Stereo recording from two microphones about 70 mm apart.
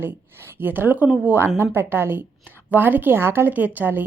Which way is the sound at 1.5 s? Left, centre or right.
Right.